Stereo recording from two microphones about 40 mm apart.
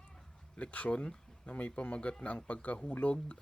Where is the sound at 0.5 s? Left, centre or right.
Left.